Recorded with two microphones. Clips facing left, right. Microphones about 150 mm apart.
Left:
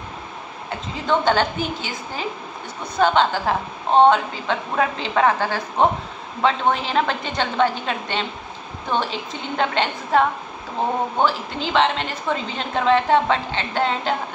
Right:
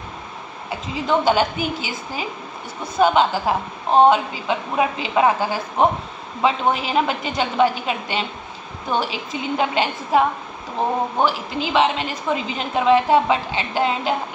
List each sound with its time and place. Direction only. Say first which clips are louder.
0.7 s a woman's voice: right 1 dB; 10° right (ahead or behind)